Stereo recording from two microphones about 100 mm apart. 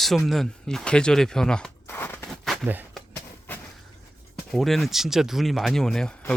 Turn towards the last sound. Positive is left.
turn(degrees=5)  # may be behind; listen again after turning